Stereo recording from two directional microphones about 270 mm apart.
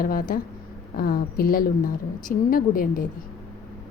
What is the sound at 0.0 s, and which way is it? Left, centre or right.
A woman's voice, left.